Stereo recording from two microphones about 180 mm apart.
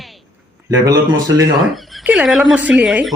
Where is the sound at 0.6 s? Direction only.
20° right (ahead or behind).